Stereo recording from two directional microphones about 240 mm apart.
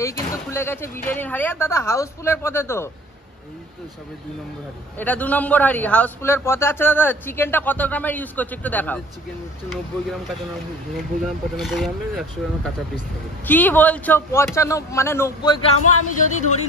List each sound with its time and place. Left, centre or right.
0.0 s a man's voice: centre
4.9 s a man's voice: centre
11.5 s a man's voice: centre
15.8 s speech: left